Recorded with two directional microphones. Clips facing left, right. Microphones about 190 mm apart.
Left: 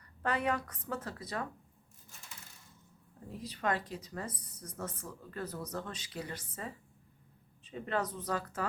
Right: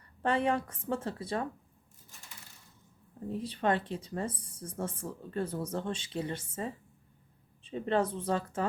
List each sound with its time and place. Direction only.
0.2 s speech: 25° right (ahead or behind)
3.2 s speech: 30° right (ahead or behind)